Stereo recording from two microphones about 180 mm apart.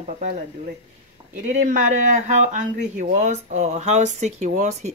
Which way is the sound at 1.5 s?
45° right (ahead or behind).